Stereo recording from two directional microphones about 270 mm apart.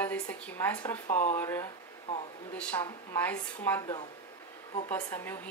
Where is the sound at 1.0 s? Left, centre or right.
Left.